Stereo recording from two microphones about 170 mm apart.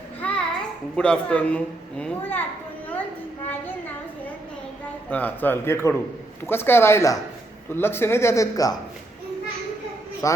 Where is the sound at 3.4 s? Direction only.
10° left (ahead or behind).